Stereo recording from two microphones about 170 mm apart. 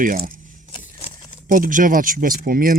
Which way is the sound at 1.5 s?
55° right (ahead or behind).